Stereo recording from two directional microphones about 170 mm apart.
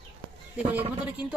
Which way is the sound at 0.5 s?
10° right (ahead or behind).